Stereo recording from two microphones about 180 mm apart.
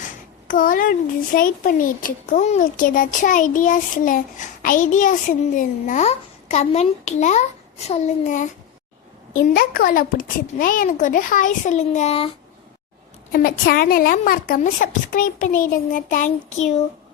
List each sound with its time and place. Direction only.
0.4 s a child's voice: 50° left (ahead or behind)
13.3 s a child's voice: 55° left (ahead or behind)